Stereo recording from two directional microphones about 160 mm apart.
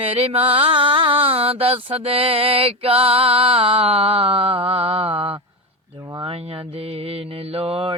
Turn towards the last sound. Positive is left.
turn(degrees=-35)  # may be behind; listen again after turning